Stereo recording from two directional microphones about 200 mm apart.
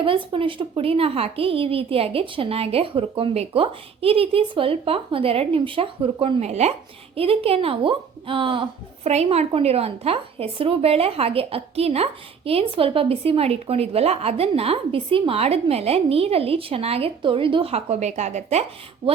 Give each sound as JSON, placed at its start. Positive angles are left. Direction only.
{"t": 0.0, "sound": "speech", "side_deg": -25}